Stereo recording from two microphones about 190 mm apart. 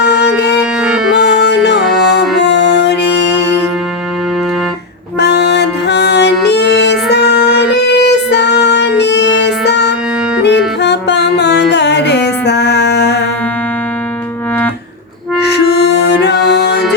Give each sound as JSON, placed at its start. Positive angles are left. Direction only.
{"t": 0.0, "sound": "music", "side_deg": 60}
{"t": 0.6, "sound": "music", "side_deg": -5}
{"t": 1.5, "sound": "music", "side_deg": 65}
{"t": 5.2, "sound": "music", "side_deg": 60}
{"t": 15.4, "sound": "music", "side_deg": 60}